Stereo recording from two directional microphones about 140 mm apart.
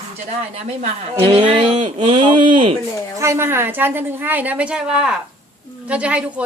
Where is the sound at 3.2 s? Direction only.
20° right (ahead or behind).